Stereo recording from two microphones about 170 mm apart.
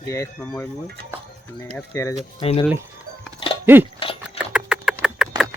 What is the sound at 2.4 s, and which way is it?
Speech, 30° left (ahead or behind).